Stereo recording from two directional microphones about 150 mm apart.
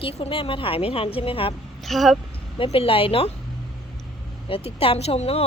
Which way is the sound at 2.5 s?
40° left (ahead or behind).